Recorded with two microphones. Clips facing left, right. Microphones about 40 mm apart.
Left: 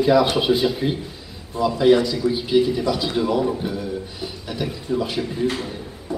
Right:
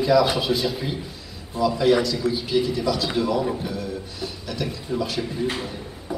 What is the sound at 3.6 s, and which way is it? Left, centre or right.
Music, centre.